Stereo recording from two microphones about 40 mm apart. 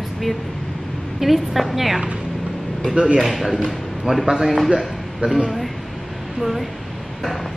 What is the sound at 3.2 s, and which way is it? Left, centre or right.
A woman's voice, centre.